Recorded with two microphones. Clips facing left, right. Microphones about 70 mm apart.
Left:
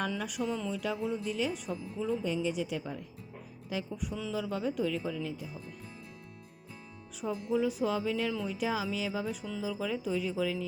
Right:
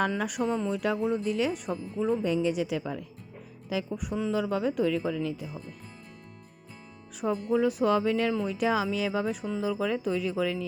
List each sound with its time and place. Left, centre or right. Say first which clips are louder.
0.1 s speech: right 5 dB; right
0.4 s speech: right 6 dB; right
1.7 s speech: right 5 dB; right
2.2 s speech: right 5 dB; right
7.2 s speech: right 5 dB; right